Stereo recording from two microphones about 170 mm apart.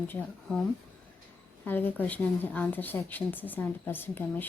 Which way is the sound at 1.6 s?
10° left (ahead or behind).